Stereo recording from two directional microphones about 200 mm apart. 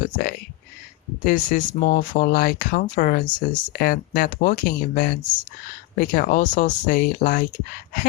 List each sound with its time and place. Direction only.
1.2 s speech: 40° left (ahead or behind)
3.2 s speech: 20° left (ahead or behind)
3.7 s speech: 45° left (ahead or behind)